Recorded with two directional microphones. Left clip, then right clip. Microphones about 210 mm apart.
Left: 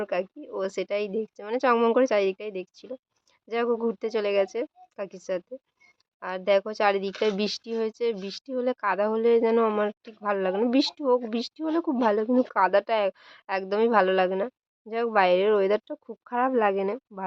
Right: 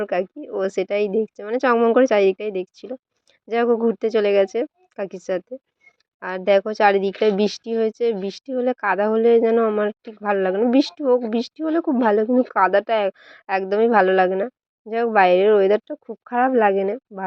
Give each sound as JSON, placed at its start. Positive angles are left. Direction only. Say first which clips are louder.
{"t": 0.0, "sound": "speech", "louder": "right 6 dB", "side_deg": -15}